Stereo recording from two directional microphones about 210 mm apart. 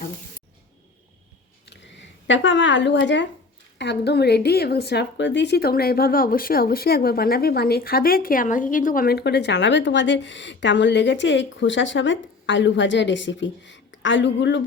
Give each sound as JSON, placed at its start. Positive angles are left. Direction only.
{"t": 1.7, "sound": "a woman's voice", "side_deg": 60}